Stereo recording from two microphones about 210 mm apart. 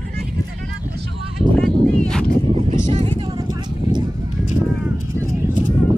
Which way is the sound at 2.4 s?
30° right (ahead or behind).